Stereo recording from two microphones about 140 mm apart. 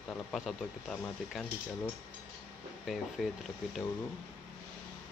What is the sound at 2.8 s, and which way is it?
Speech, centre (ahead or behind).